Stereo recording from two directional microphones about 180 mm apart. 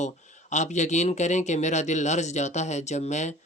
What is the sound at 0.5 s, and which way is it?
Speech, 40° left (ahead or behind).